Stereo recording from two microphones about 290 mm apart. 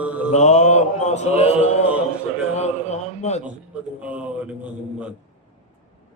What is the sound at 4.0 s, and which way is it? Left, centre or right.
Mantra, centre.